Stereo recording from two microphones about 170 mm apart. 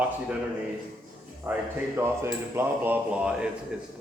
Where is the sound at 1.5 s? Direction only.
15° right (ahead or behind).